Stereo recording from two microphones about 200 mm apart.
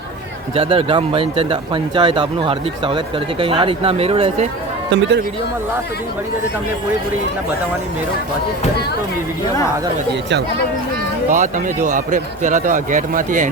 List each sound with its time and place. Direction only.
0.5 s speech: 30° right (ahead or behind)
4.9 s a man's voice: 60° right (ahead or behind)
11.3 s speech: 40° right (ahead or behind)